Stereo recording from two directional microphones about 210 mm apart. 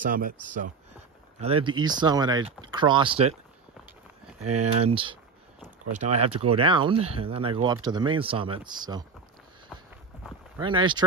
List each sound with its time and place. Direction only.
0.0 s speech: 40° right (ahead or behind)
1.4 s speech: 25° right (ahead or behind)
4.4 s speech: 90° right
4.8 s speech: 25° right (ahead or behind)
6.1 s speech: 90° right
6.4 s speech: 25° right (ahead or behind)
10.6 s speech: 25° right (ahead or behind)